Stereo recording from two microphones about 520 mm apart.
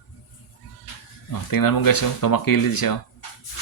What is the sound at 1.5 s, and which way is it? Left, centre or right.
Speech, left.